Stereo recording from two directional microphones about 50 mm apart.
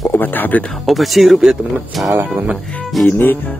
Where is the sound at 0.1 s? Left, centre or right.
Left.